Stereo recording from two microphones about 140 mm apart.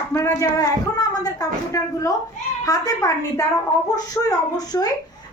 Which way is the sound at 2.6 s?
25° left (ahead or behind).